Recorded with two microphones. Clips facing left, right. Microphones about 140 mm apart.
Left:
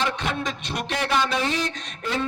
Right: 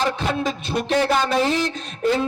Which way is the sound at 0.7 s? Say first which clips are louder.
Right 6 dB; 30° right (ahead or behind).